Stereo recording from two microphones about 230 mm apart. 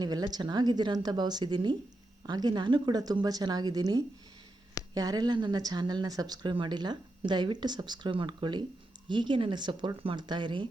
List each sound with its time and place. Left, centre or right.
0.0 s speech: centre